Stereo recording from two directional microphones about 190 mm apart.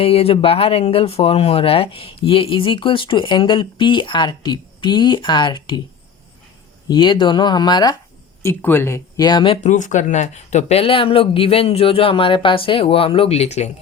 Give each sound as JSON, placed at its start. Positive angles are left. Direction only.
{"t": 0.0, "sound": "speech", "side_deg": 30}
{"t": 6.8, "sound": "speech", "side_deg": 25}
{"t": 9.6, "sound": "speech", "side_deg": 40}